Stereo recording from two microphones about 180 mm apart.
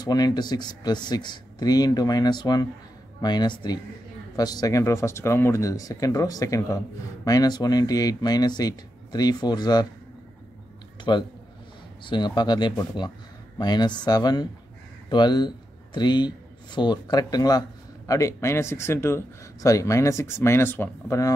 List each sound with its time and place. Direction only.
0.0 s speech: 20° left (ahead or behind)
11.1 s speech: 25° left (ahead or behind)